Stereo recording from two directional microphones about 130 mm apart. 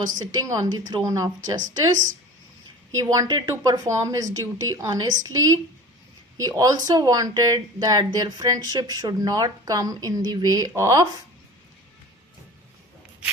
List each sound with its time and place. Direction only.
0.2 s speech: 30° right (ahead or behind)
3.0 s speech: 25° right (ahead or behind)